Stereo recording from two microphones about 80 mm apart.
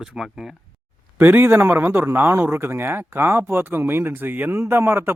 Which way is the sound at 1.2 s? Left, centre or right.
Right.